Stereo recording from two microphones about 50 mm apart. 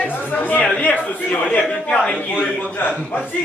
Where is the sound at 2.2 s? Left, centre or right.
Left.